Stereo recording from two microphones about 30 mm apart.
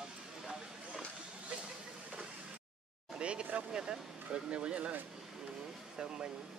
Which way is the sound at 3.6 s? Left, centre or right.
Right.